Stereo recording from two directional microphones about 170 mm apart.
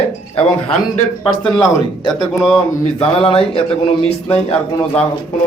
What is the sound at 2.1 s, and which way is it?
Speech, centre (ahead or behind).